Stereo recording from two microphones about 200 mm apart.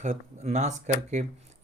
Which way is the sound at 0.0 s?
35° right (ahead or behind).